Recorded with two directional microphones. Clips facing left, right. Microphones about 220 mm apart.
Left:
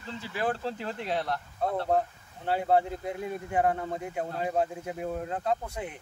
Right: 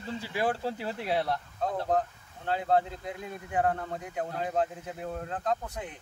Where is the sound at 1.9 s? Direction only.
10° left (ahead or behind).